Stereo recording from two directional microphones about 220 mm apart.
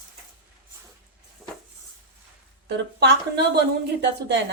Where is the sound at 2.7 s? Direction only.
50° right (ahead or behind).